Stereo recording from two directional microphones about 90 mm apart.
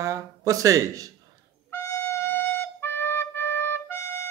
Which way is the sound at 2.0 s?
25° left (ahead or behind).